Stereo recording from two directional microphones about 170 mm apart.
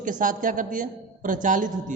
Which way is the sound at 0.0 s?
50° right (ahead or behind).